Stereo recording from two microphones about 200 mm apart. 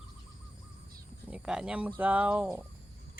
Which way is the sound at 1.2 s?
5° right (ahead or behind).